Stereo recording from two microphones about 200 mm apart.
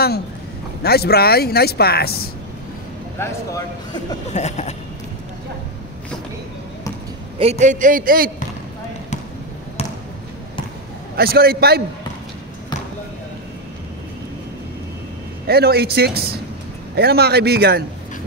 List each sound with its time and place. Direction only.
0.8 s speech: 50° left (ahead or behind)
4.3 s speech: 35° left (ahead or behind)
7.3 s a man's voice: 35° right (ahead or behind)
11.1 s speech: 50° right (ahead or behind)
15.4 s speech: 50° right (ahead or behind)